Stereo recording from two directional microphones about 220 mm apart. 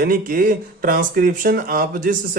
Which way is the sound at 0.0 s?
40° right (ahead or behind).